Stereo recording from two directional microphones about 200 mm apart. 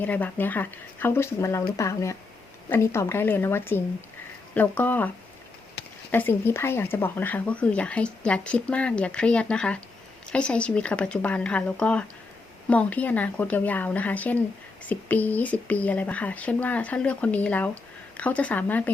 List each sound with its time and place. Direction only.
0.0 s speech: 10° left (ahead or behind)